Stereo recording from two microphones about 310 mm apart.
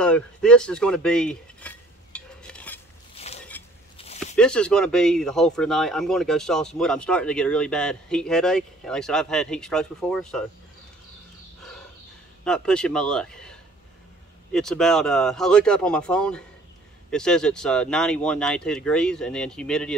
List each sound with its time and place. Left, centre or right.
0.0 s cutlery: centre
3.5 s biting: centre
4.0 s a sound: left
4.4 s speech: centre
12.4 s speech: centre